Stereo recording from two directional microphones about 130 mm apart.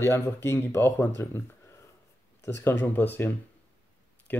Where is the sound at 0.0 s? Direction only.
20° left (ahead or behind).